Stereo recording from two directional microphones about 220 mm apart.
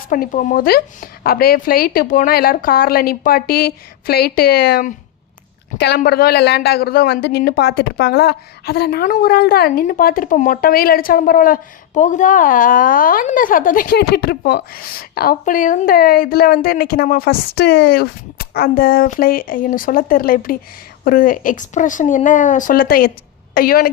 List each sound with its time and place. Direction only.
0.1 s a woman's voice: 35° left (ahead or behind)